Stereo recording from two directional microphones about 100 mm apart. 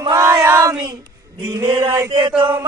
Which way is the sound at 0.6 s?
40° right (ahead or behind).